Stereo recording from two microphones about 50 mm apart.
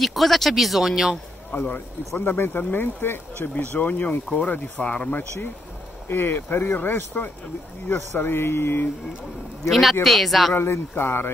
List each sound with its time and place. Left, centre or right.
0.0 s speech: centre
1.5 s speech: left
6.0 s speech: left
9.7 s speech: centre
10.5 s speech: left